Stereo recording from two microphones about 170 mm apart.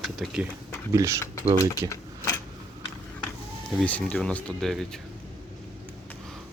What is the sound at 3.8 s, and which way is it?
Speech, 5° left (ahead or behind).